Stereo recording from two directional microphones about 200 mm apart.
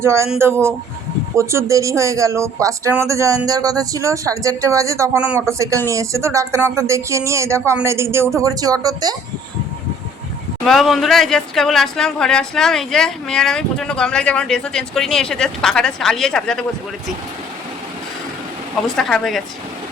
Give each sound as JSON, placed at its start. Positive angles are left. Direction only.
{"t": 0.0, "sound": "speech", "side_deg": -15}
{"t": 10.7, "sound": "speech", "side_deg": 0}
{"t": 18.9, "sound": "speech", "side_deg": 0}